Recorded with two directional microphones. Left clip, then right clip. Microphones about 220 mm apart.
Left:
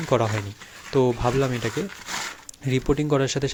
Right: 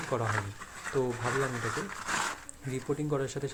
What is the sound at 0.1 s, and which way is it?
Speech, 40° left (ahead or behind).